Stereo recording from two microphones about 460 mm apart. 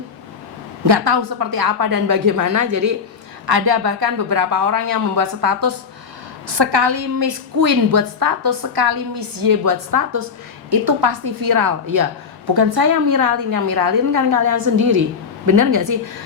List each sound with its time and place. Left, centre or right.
0.9 s a woman's voice: right
3.4 s a woman's voice: right
6.6 s a woman's voice: right
10.7 s a woman's voice: right